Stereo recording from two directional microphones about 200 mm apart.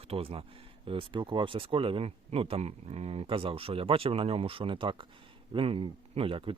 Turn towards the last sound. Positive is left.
turn(degrees=-25)  # may be behind; listen again after turning